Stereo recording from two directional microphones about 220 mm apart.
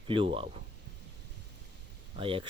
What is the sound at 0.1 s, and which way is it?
Speech, 25° right (ahead or behind).